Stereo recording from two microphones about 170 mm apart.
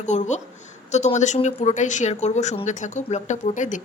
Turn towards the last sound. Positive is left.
turn(degrees=45)  # may be behind; listen again after turning